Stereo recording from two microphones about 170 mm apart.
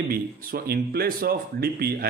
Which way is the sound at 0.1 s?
60° right (ahead or behind).